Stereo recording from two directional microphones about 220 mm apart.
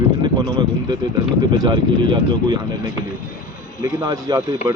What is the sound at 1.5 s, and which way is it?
Speech, 20° right (ahead or behind).